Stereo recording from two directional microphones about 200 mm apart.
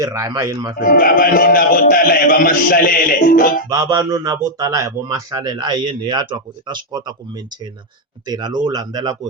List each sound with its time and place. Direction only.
0.0 s speech: 15° right (ahead or behind)
0.8 s a man's voice: 45° left (ahead or behind)
3.7 s a man's voice: 15° right (ahead or behind)